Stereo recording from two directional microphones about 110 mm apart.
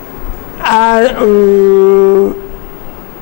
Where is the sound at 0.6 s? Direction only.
20° left (ahead or behind).